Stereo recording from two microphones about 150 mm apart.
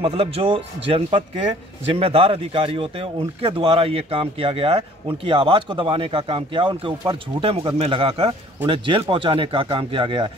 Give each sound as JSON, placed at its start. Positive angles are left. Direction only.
{"t": 0.0, "sound": "a man's voice", "side_deg": -40}